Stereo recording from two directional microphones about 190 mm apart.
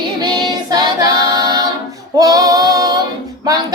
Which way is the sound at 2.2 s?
20° right (ahead or behind).